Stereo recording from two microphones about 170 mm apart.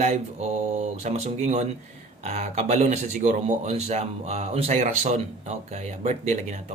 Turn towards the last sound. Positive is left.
turn(degrees=-45)  # may be behind; listen again after turning